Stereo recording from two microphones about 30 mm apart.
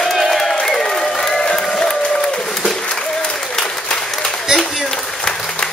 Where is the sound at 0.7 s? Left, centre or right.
Centre.